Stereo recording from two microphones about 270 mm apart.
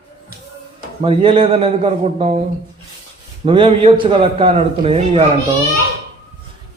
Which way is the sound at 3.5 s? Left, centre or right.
Right.